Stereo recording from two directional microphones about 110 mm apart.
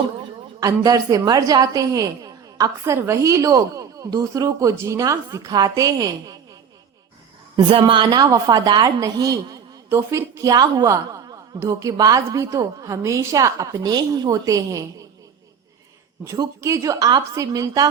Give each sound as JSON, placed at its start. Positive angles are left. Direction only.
{"t": 0.6, "sound": "a woman's voice", "side_deg": -35}
{"t": 7.5, "sound": "a woman's voice", "side_deg": -50}
{"t": 8.2, "sound": "a woman's voice", "side_deg": -35}
{"t": 16.6, "sound": "a woman's voice", "side_deg": -30}